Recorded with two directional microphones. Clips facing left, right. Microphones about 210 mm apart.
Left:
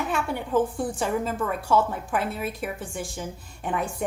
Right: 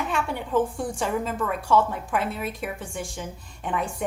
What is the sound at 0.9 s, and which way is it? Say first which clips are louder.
Speech: right 1 dB; 40° left (ahead or behind).